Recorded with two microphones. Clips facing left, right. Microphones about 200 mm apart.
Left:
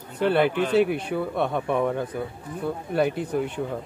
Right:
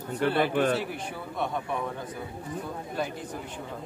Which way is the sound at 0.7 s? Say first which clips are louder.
Left 11 dB; 65° left (ahead or behind).